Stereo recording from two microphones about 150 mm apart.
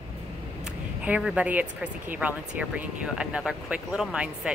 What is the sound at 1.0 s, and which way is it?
Speech, 10° right (ahead or behind).